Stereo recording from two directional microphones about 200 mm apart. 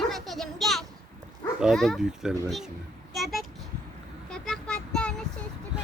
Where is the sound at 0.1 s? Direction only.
Centre (ahead or behind).